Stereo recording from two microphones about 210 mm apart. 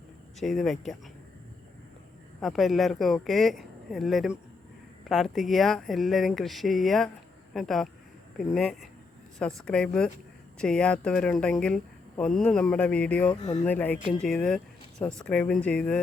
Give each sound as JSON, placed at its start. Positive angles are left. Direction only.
{"t": 0.3, "sound": "a woman's voice", "side_deg": 0}
{"t": 2.4, "sound": "a woman's voice", "side_deg": 0}
{"t": 13.4, "sound": "speech", "side_deg": 30}
{"t": 13.7, "sound": "a woman's voice", "side_deg": 5}